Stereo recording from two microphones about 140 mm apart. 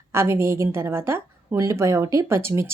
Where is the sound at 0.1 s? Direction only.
20° right (ahead or behind).